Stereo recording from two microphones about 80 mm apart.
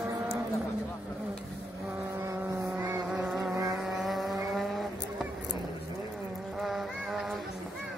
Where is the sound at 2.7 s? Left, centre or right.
Right.